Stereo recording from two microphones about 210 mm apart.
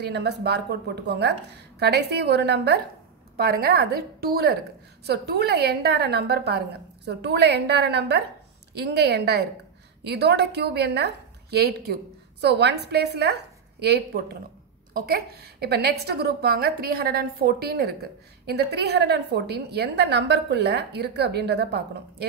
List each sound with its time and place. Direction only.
0.0 s a woman's voice: 55° right (ahead or behind)